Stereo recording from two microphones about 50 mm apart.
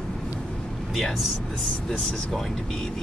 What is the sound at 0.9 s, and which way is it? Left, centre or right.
Speech, centre.